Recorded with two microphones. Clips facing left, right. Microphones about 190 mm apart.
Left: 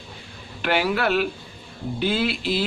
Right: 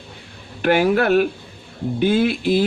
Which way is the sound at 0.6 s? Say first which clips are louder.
Right 6 dB; 50° right (ahead or behind).